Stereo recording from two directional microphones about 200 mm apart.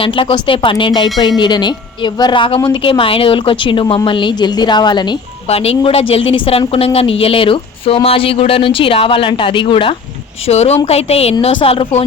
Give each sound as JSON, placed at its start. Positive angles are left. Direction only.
{"t": 0.0, "sound": "a woman's voice", "side_deg": 25}